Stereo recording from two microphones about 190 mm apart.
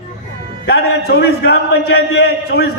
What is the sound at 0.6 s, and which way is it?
A man's voice, 55° left (ahead or behind).